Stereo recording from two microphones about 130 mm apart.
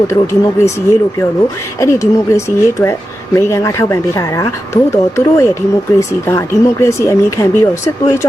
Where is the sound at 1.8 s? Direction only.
20° left (ahead or behind).